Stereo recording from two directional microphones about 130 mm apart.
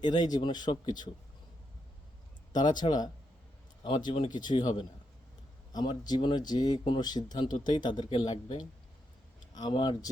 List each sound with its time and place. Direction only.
0.0 s speech: 30° left (ahead or behind)
2.5 s speech: 35° left (ahead or behind)
5.7 s speech: 35° left (ahead or behind)